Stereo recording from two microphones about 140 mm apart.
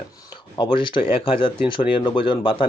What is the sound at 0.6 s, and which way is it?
Speech, 35° left (ahead or behind).